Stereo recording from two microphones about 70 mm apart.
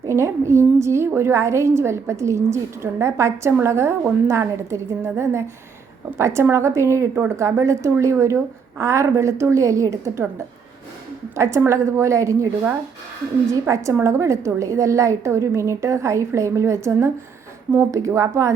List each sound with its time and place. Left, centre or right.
0.1 s a woman's voice: right
13.5 s a woman's voice: right